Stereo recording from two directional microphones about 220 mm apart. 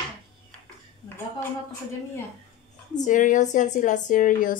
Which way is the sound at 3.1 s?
35° left (ahead or behind).